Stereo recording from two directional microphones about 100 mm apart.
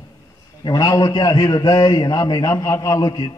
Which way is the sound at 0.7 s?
35° left (ahead or behind).